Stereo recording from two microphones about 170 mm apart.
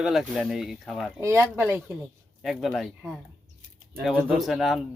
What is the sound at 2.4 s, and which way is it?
Speech, centre (ahead or behind).